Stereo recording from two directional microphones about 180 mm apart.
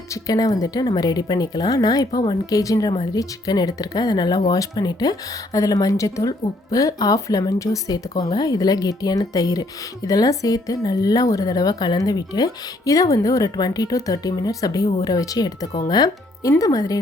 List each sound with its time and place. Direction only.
0.1 s speech: 20° left (ahead or behind)